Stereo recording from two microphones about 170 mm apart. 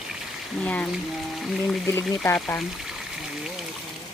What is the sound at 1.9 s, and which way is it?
Speech, 15° left (ahead or behind).